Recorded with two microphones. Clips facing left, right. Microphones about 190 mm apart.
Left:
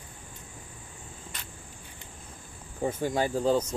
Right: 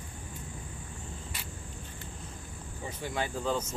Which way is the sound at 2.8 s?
50° left (ahead or behind).